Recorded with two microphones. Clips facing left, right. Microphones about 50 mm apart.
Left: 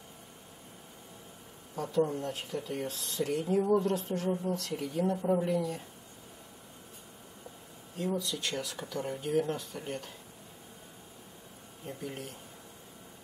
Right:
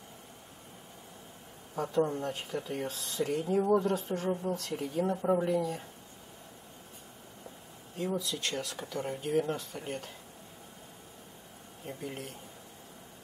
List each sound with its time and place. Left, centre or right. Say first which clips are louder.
2.0 s speech: even; right
2.9 s speech: right 1 dB; centre
8.0 s speech: even; centre
11.8 s speech: even; centre